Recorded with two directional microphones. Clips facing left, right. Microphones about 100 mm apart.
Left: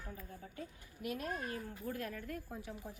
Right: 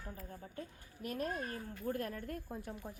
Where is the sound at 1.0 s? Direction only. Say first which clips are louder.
Right 1 dB; 40° right (ahead or behind).